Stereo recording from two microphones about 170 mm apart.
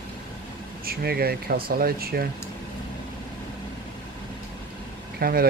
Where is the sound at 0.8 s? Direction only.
65° right (ahead or behind).